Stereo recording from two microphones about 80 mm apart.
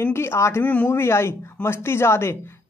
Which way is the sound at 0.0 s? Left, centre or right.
Left.